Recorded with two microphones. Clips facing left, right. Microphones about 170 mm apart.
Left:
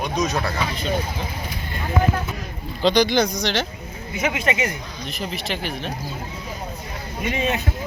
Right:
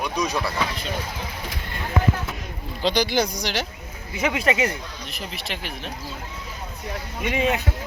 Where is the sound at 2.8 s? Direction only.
10° right (ahead or behind).